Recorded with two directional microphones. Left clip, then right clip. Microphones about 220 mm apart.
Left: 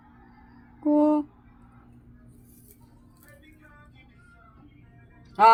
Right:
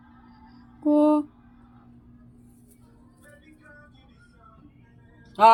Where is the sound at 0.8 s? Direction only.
10° right (ahead or behind).